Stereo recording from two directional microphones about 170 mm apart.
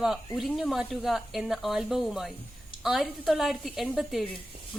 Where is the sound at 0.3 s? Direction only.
Centre (ahead or behind).